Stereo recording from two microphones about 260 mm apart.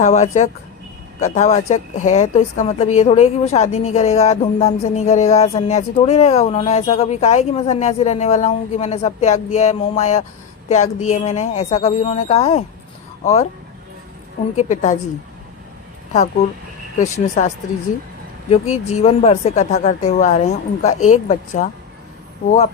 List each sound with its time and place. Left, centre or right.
0.0 s speech: left
14.5 s speech: left
16.1 s speech: left
18.5 s speech: left